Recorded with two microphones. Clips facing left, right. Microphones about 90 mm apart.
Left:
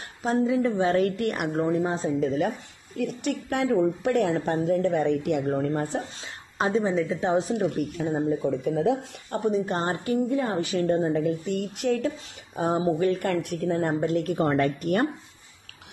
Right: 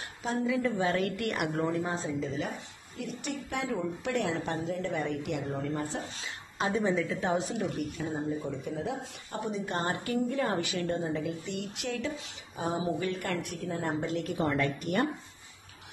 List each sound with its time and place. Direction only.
0.2 s a woman's voice: 35° left (ahead or behind)
2.0 s a woman's voice: 50° left (ahead or behind)
6.7 s a woman's voice: 25° left (ahead or behind)
7.5 s a woman's voice: 50° left (ahead or behind)
8.1 s speech: 85° left
9.3 s a woman's voice: 40° left (ahead or behind)
11.0 s a woman's voice: 50° left (ahead or behind)
12.5 s speech: 55° left (ahead or behind)
12.8 s a woman's voice: 40° left (ahead or behind)